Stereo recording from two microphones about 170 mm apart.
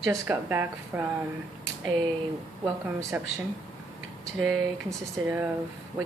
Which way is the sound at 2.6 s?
15° right (ahead or behind).